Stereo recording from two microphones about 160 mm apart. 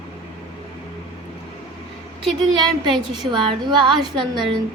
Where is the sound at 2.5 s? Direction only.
30° right (ahead or behind).